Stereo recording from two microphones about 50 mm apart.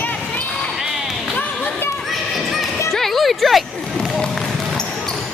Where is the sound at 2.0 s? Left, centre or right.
Centre.